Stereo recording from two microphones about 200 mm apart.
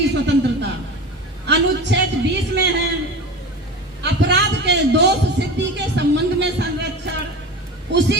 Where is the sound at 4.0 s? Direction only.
60° right (ahead or behind).